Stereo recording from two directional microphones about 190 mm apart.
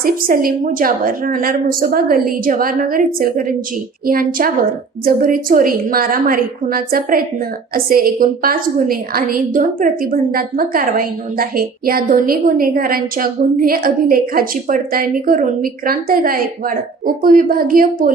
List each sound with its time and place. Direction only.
0.0 s a woman's voice: 50° right (ahead or behind)